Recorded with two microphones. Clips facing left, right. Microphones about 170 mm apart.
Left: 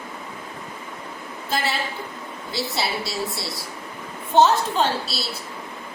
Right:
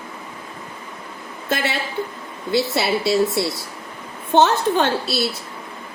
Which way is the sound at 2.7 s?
65° right (ahead or behind).